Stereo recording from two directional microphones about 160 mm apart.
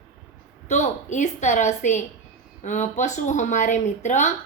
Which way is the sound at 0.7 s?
50° left (ahead or behind).